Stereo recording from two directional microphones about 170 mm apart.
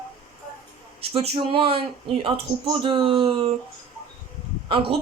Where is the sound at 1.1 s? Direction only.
35° right (ahead or behind).